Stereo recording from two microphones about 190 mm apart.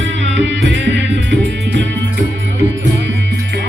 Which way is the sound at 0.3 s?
70° right (ahead or behind).